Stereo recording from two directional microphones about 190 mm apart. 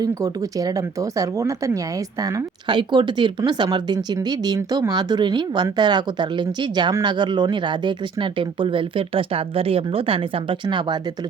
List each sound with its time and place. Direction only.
0.0 s speech: 20° right (ahead or behind)